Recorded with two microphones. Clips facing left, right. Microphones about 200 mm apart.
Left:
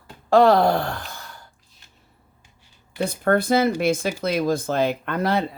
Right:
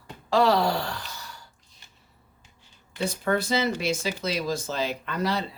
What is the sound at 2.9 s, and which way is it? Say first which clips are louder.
Speech: left 5 dB; 55° left (ahead or behind).